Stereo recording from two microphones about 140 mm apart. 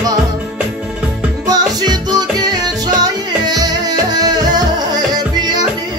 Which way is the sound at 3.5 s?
30° right (ahead or behind).